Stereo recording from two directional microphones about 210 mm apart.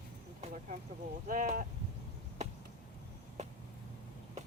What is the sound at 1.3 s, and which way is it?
Speech, 40° right (ahead or behind).